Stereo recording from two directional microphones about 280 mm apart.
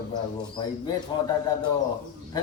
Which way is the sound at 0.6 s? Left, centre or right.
Centre.